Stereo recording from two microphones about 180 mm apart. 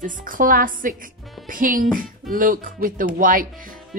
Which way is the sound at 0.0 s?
50° right (ahead or behind).